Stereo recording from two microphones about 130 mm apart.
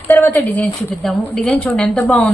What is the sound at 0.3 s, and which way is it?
A woman's voice, 5° left (ahead or behind).